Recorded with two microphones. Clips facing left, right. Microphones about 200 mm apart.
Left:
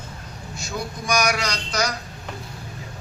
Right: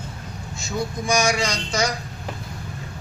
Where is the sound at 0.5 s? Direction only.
25° right (ahead or behind).